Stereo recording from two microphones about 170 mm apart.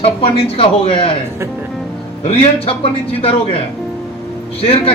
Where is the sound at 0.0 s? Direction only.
35° left (ahead or behind).